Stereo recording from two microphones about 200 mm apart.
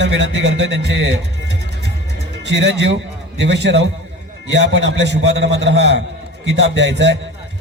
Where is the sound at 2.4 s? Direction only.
60° right (ahead or behind).